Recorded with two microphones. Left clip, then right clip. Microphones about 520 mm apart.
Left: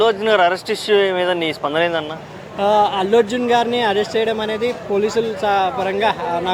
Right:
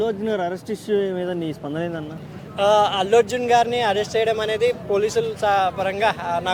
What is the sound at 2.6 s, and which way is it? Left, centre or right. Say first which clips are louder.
Speech: left 2 dB; right.